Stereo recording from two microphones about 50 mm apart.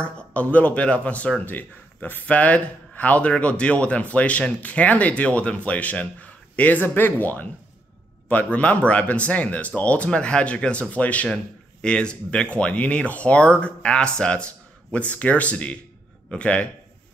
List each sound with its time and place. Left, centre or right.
0.0 s speech: left
1.4 s speech: left
2.2 s a man's voice: left